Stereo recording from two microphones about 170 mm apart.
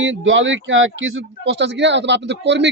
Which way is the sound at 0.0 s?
90° right.